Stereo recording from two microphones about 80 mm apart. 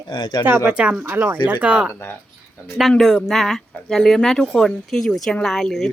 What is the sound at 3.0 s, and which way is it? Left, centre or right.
Speech, centre.